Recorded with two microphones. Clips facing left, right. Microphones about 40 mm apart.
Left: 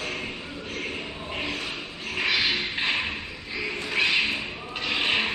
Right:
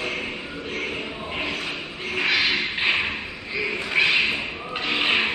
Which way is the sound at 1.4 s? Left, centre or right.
Centre.